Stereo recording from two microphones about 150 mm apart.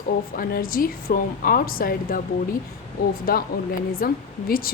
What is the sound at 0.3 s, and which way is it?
A woman's voice, 75° left (ahead or behind).